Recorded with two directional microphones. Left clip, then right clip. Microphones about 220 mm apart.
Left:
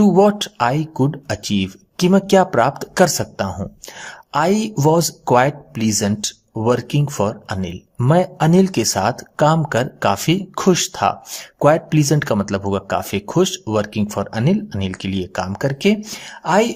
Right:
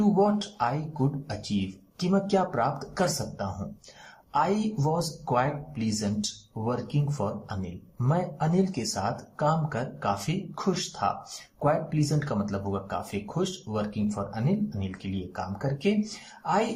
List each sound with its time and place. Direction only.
0.0 s speech: 45° left (ahead or behind)
7.2 s speech: 50° left (ahead or behind)